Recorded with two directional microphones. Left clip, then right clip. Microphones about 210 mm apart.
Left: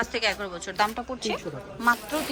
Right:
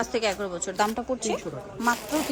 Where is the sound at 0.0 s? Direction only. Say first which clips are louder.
Even; 20° right (ahead or behind).